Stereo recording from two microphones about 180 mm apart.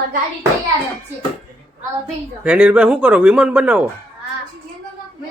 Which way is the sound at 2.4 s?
5° right (ahead or behind).